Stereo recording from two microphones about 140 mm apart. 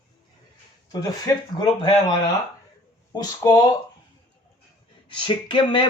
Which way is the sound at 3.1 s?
30° left (ahead or behind).